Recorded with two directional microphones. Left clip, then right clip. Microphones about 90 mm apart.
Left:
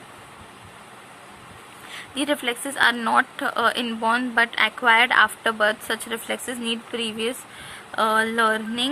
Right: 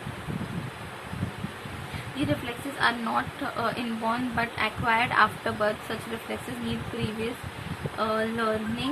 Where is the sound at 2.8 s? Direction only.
90° left.